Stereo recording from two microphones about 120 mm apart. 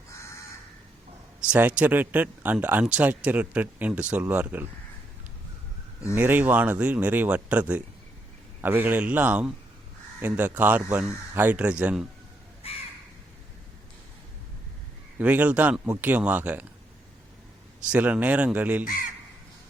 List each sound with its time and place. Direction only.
1.4 s speech: 10° right (ahead or behind)
6.1 s speech: 15° right (ahead or behind)
12.6 s crow: 55° left (ahead or behind)
15.2 s speech: 10° right (ahead or behind)
17.9 s speech: 10° right (ahead or behind)